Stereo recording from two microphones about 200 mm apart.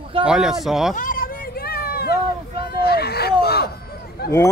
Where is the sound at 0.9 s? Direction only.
45° left (ahead or behind).